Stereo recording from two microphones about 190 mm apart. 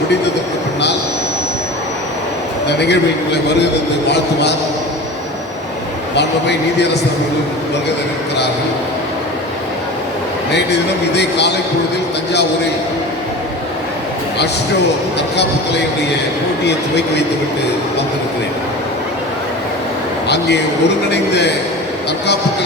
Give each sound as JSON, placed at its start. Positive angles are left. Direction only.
{"t": 2.6, "sound": "speech", "side_deg": 65}
{"t": 10.5, "sound": "speech", "side_deg": 65}
{"t": 20.2, "sound": "speech", "side_deg": 65}